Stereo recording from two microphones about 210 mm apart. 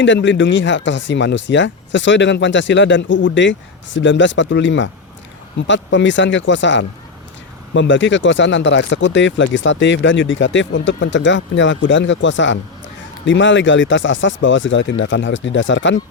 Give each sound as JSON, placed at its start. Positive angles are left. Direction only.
{"t": 0.0, "sound": "speech", "side_deg": 60}